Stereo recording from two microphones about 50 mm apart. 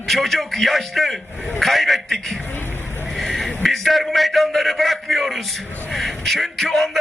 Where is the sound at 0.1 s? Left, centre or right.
Centre.